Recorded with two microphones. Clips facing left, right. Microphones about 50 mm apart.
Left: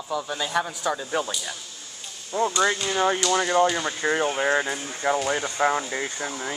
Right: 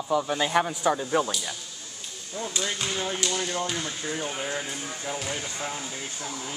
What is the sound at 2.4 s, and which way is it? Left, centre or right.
Speech, left.